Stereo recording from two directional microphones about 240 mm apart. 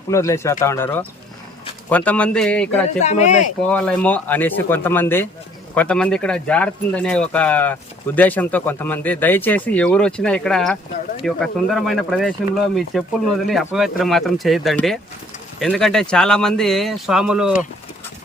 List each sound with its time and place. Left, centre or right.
0.1 s speech: centre
3.0 s speech: left
3.7 s speech: centre